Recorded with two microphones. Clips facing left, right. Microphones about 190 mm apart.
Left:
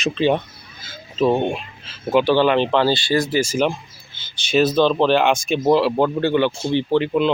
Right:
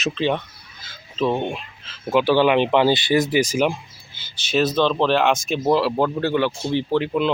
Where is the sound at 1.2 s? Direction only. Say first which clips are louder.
Left 4 dB; 25° left (ahead or behind).